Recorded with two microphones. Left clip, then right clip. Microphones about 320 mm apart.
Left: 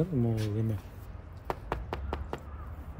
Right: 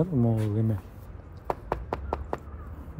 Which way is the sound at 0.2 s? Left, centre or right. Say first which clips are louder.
Right 5 dB; right.